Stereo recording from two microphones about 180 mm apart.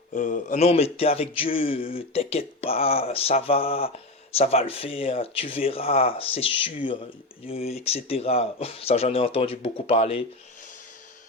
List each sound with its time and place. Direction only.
0.1 s speech: 45° left (ahead or behind)